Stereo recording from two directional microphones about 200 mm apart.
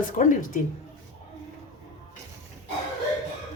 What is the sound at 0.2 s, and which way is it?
Speech, 40° left (ahead or behind).